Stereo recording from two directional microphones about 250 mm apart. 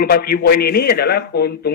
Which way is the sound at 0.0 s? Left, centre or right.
Left.